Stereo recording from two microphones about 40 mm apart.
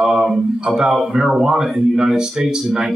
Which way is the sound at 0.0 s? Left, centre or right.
Centre.